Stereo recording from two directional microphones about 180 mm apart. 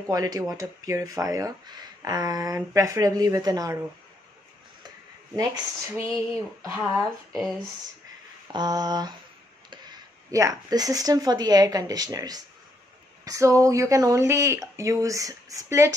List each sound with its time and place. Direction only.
0.1 s speech: 20° right (ahead or behind)
5.3 s speech: 20° right (ahead or behind)
6.8 s speech: centre (ahead or behind)
8.5 s speech: 20° right (ahead or behind)